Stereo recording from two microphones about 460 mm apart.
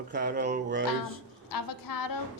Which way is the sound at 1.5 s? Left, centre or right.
Left.